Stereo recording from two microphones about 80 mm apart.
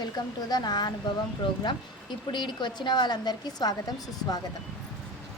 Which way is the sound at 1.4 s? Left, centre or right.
Left.